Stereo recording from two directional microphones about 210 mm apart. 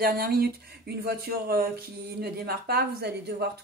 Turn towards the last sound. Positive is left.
turn(degrees=-50)  # may be behind; listen again after turning